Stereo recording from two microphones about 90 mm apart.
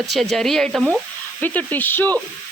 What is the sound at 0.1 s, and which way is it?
Speech, centre (ahead or behind).